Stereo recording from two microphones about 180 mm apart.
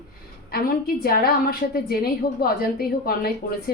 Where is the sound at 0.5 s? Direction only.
55° left (ahead or behind).